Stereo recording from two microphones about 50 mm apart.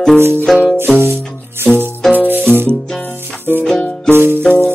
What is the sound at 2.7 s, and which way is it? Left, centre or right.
Music, centre.